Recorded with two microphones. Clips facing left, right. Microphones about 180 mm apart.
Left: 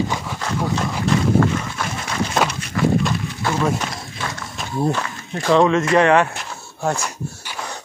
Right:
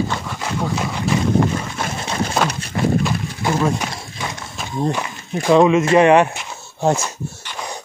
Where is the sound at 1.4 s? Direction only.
25° right (ahead or behind).